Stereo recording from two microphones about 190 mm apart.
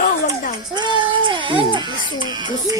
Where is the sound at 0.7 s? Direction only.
25° right (ahead or behind).